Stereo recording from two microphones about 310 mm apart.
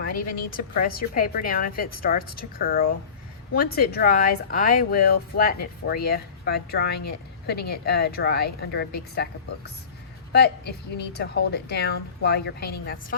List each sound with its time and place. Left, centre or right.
0.3 s a woman's voice: left
10.3 s speech: left